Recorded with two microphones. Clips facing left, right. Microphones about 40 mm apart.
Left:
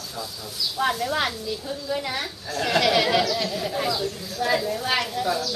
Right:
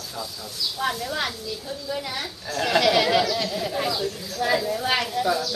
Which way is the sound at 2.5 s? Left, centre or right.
Centre.